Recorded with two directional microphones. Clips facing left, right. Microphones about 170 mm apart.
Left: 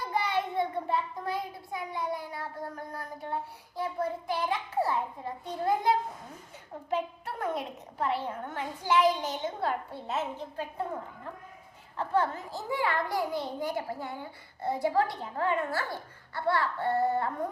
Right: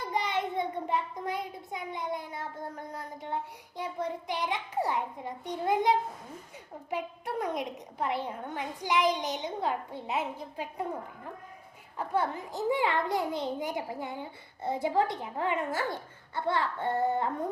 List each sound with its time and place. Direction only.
0.1 s a child's voice: 20° right (ahead or behind)
6.9 s a woman's voice: 15° right (ahead or behind)
11.9 s a child's voice: 15° right (ahead or behind)